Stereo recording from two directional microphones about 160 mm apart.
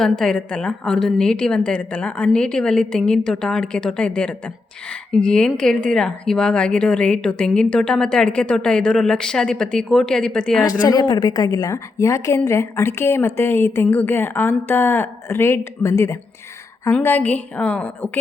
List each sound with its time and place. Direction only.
0.0 s speech: 5° left (ahead or behind)
10.6 s a woman's voice: 25° left (ahead or behind)